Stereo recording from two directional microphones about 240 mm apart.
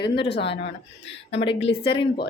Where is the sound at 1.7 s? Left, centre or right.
Left.